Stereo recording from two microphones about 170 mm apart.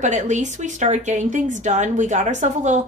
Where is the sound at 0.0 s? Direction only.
45° right (ahead or behind).